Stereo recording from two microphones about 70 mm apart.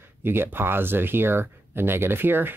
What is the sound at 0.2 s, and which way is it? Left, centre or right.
Speech, right.